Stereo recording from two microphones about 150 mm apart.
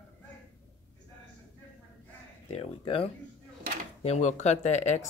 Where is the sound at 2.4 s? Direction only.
40° left (ahead or behind).